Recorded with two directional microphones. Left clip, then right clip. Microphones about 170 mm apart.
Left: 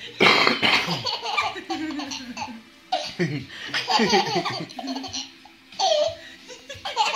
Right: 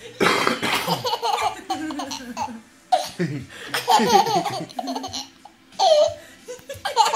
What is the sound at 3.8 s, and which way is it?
Laughter, 35° right (ahead or behind).